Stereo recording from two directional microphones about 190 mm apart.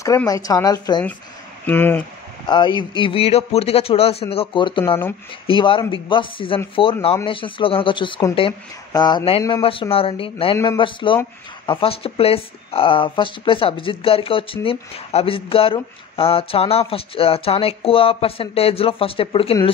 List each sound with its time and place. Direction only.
0.3 s speech: 20° left (ahead or behind)
1.7 s speech: 10° left (ahead or behind)
2.4 s speech: 25° left (ahead or behind)